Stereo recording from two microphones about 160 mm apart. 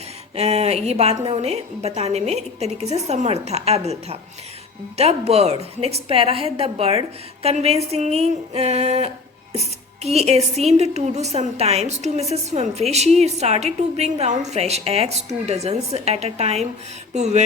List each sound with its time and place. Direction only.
0.3 s a woman's voice: 40° right (ahead or behind)